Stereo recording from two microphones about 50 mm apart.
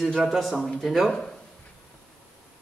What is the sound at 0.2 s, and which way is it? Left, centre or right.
A man's voice, centre.